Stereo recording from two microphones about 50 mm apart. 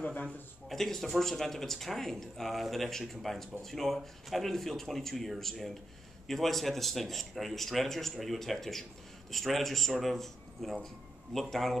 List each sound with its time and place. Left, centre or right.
0.0 s speech: left
0.7 s speech: centre